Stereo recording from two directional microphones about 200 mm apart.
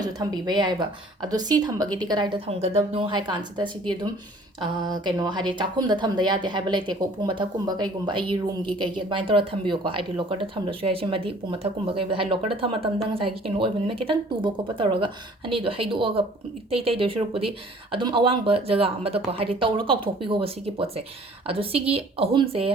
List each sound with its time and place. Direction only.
0.0 s speech: 20° right (ahead or behind)